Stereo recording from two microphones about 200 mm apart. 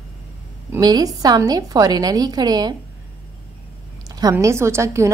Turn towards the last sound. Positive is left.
turn(degrees=-15)  # may be behind; listen again after turning